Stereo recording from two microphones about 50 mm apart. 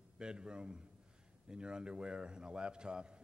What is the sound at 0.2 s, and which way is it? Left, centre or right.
A man's voice, centre.